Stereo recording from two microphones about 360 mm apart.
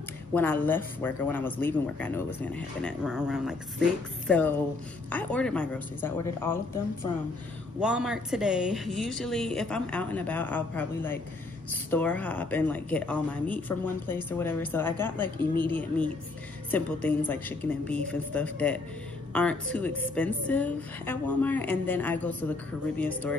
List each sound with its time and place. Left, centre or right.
0.3 s a woman's voice: centre